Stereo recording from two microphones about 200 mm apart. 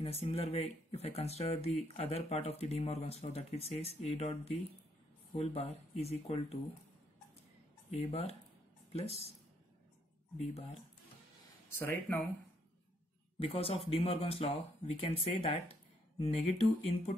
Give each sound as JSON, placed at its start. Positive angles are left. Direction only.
{"t": 0.0, "sound": "speech", "side_deg": 30}
{"t": 8.0, "sound": "speech", "side_deg": 30}
{"t": 10.4, "sound": "speech", "side_deg": 30}
{"t": 11.8, "sound": "speech", "side_deg": 10}
{"t": 13.4, "sound": "speech", "side_deg": 30}